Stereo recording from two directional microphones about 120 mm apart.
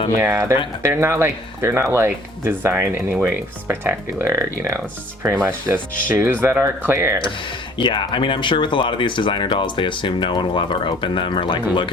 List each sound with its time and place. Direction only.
0.2 s speech: 20° right (ahead or behind)
7.8 s speech: 40° left (ahead or behind)